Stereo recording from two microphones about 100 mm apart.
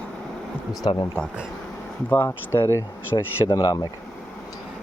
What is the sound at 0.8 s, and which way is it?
Speech, 55° left (ahead or behind).